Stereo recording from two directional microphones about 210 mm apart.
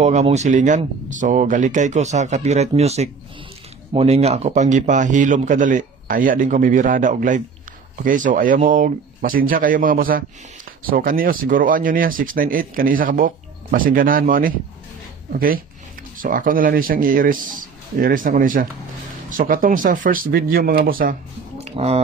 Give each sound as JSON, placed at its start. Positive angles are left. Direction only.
{"t": 0.0, "sound": "a man's voice", "side_deg": -35}
{"t": 21.6, "sound": "speech", "side_deg": -30}